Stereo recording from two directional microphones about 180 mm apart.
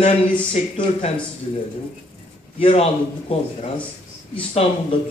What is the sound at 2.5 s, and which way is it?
Speech, 35° left (ahead or behind).